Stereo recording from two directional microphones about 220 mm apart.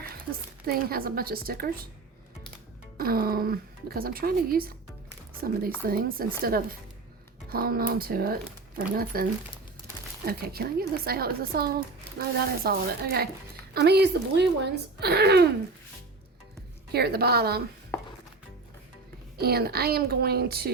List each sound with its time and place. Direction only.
0.6 s speech: 45° right (ahead or behind)
3.0 s speech: 40° right (ahead or behind)
16.9 s speech: 45° right (ahead or behind)
19.4 s speech: 45° right (ahead or behind)